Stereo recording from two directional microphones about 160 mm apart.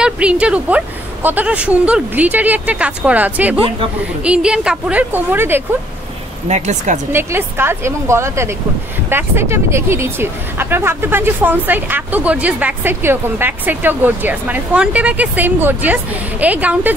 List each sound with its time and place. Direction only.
0.0 s speech: 5° right (ahead or behind)
6.5 s speech: 45° right (ahead or behind)
7.1 s speech: 15° right (ahead or behind)